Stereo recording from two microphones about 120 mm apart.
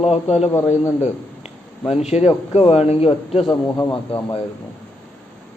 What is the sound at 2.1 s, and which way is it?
A man's voice, 60° left (ahead or behind).